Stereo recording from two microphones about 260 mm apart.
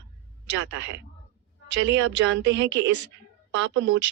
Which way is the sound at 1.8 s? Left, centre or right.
Right.